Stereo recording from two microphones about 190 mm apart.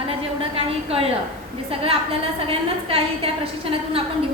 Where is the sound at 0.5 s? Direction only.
30° right (ahead or behind).